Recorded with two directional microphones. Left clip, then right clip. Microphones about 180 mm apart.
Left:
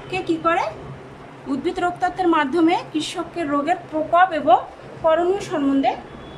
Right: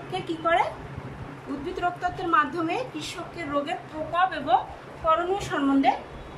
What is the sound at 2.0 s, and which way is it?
A woman's voice, 50° left (ahead or behind).